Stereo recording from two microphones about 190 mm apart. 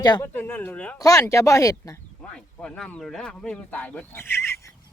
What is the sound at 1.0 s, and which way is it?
Speech, 20° left (ahead or behind).